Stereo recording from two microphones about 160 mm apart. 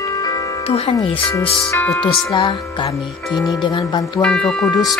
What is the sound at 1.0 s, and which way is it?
Speech, 35° left (ahead or behind).